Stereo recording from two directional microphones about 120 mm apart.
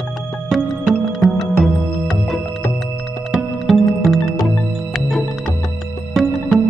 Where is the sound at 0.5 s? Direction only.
Centre (ahead or behind).